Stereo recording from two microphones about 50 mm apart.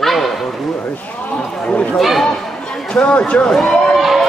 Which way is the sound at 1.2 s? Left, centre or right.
Left.